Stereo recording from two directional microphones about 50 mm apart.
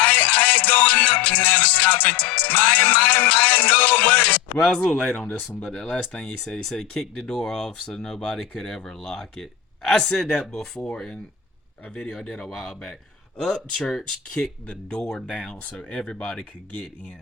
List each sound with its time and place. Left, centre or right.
0.0 s music: left
4.9 s speech: centre
6.4 s speech: centre
11.9 s speech: centre
12.5 s speech: centre